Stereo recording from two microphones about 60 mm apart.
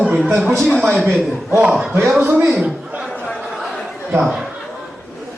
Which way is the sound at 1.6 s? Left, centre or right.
Centre.